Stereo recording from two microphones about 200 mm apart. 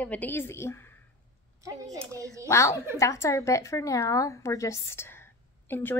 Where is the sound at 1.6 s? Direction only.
15° right (ahead or behind).